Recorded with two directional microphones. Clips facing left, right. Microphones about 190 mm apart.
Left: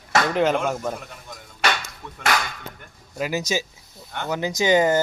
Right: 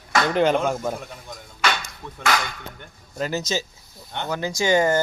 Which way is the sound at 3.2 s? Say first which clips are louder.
Left 1 dB; 10° left (ahead or behind).